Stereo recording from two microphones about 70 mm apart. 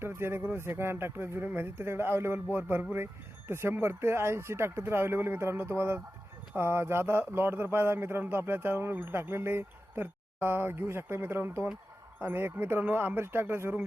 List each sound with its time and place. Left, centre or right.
0.0 s speech: right